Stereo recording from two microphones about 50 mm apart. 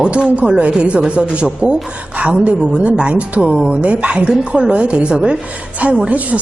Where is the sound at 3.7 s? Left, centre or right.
Right.